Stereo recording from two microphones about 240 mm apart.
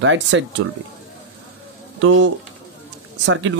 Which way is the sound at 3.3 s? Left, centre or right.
Right.